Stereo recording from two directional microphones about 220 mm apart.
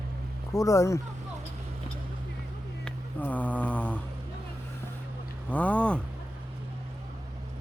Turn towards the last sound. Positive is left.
turn(degrees=5)  # may be behind; listen again after turning